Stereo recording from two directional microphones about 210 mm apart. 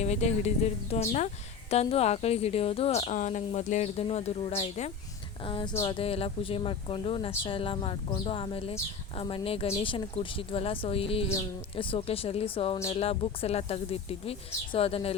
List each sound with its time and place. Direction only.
0.0 s a woman's voice: 30° left (ahead or behind)